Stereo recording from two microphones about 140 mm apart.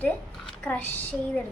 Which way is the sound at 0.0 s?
10° left (ahead or behind).